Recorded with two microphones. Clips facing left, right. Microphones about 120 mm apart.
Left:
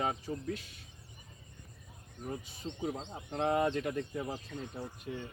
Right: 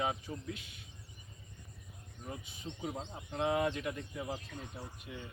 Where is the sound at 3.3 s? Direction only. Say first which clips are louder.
Left 2 dB; 45° left (ahead or behind).